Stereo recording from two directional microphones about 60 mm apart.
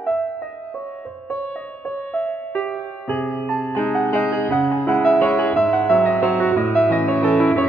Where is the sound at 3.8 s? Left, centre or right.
Left.